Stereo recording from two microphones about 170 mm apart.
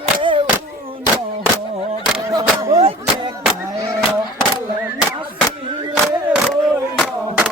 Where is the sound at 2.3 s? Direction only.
20° right (ahead or behind).